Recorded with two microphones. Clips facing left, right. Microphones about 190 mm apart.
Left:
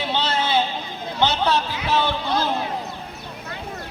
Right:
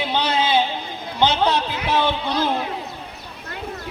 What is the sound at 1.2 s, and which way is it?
Speech, 15° right (ahead or behind).